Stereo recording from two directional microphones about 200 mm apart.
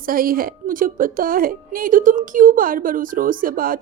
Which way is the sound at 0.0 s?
45° right (ahead or behind).